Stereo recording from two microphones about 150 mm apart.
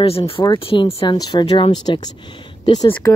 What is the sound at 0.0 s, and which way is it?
Speech, 40° left (ahead or behind).